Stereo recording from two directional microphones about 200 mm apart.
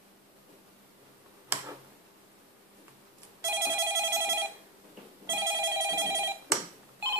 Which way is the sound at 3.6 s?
15° right (ahead or behind).